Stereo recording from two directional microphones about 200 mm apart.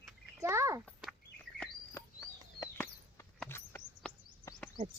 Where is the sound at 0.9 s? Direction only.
Centre (ahead or behind).